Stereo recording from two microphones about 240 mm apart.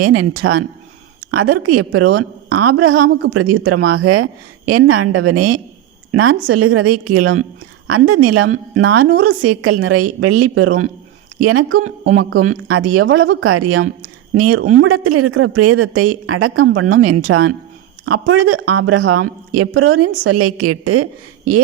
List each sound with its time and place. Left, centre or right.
0.0 s a woman's voice: right
11.8 s speech: right
12.1 s a woman's voice: right